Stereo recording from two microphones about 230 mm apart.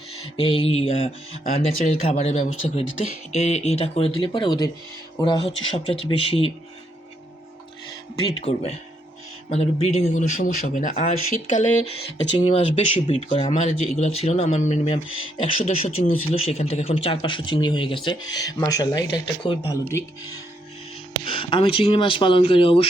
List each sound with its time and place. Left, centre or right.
0.3 s speech: left
8.4 s speech: left
21.2 s speech: left